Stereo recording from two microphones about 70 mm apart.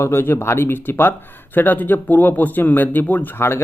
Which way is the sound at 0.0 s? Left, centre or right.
Left.